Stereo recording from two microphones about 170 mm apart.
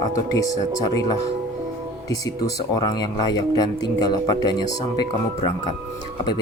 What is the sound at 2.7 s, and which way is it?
Speech, 25° left (ahead or behind).